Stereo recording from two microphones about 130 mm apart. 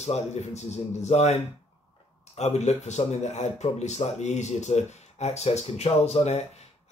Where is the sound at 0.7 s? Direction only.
60° left (ahead or behind).